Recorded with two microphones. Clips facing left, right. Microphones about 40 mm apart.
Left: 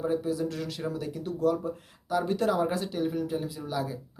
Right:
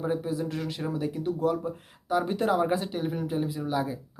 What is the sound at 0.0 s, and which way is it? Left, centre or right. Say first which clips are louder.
Speech: left 1 dB; centre.